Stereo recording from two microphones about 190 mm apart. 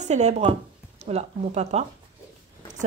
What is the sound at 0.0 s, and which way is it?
Speech, 35° right (ahead or behind).